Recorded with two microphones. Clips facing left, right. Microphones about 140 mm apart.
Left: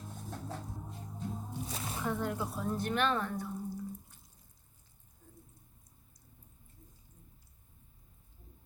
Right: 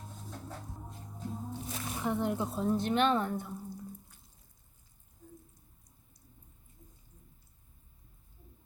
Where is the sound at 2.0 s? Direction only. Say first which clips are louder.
Right 3 dB; 20° right (ahead or behind).